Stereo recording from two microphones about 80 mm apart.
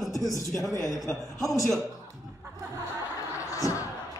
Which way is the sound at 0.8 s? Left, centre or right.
Centre.